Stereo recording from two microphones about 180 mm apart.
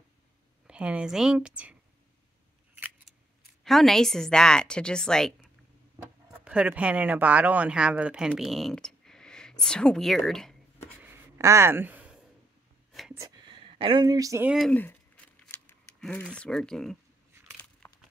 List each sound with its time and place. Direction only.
0.7 s a woman's voice: 5° right (ahead or behind)
3.6 s a woman's voice: centre (ahead or behind)
5.9 s speech: 5° right (ahead or behind)
11.1 s a sound: 15° right (ahead or behind)
13.5 s speech: 30° right (ahead or behind)
14.5 s a woman's voice: centre (ahead or behind)
14.8 s a sound: 10° left (ahead or behind)